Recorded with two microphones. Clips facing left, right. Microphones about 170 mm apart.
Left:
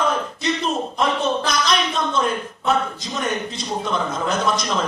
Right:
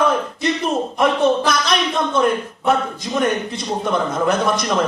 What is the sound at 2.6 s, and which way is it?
A man's voice, 55° right (ahead or behind).